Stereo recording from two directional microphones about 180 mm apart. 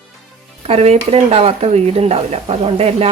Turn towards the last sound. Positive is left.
turn(degrees=-35)  # may be behind; listen again after turning